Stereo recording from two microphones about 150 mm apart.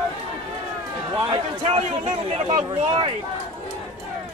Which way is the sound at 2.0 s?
35° right (ahead or behind).